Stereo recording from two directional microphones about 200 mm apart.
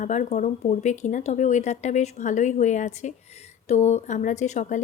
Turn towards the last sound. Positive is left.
turn(degrees=35)  # may be behind; listen again after turning